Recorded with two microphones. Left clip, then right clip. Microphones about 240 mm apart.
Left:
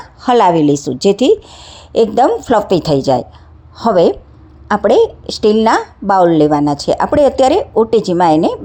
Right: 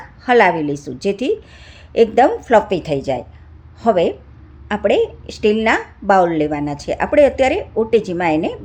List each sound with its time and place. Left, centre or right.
0.2 s a woman's voice: left
4.7 s a woman's voice: centre
5.0 s a woman's voice: left